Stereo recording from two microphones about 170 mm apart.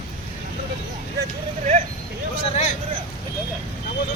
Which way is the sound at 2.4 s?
40° left (ahead or behind).